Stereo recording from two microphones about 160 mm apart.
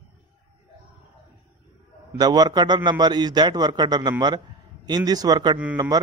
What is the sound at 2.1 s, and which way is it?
A man's voice, 25° right (ahead or behind).